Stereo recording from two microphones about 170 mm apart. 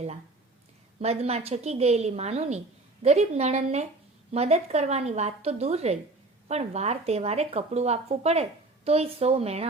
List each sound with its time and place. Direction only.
0.9 s speech: 35° right (ahead or behind)